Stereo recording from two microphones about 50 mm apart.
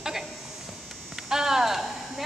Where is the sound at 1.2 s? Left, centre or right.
Centre.